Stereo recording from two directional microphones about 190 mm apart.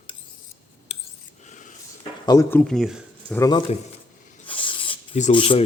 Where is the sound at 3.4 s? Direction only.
20° left (ahead or behind).